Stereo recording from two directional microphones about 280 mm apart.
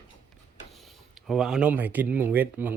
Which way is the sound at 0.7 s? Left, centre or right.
Centre.